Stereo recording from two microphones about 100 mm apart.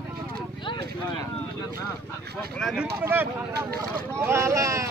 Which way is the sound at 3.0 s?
20° right (ahead or behind).